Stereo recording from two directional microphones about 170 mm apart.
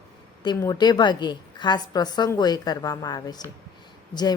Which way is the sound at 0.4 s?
20° left (ahead or behind).